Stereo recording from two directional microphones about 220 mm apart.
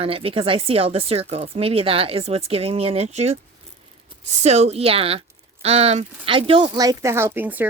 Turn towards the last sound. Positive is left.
turn(degrees=-10)  # may be behind; listen again after turning